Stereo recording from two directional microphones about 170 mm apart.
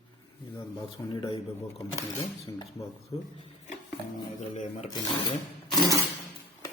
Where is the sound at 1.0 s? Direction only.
25° left (ahead or behind).